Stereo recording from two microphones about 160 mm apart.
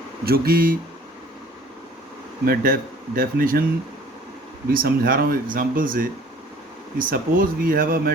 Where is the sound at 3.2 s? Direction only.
65° right (ahead or behind).